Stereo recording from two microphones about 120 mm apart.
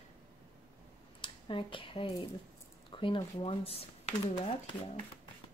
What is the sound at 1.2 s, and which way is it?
Speech, 45° left (ahead or behind).